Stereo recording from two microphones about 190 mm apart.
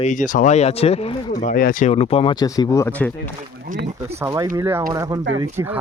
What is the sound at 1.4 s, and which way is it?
Speech, 45° left (ahead or behind).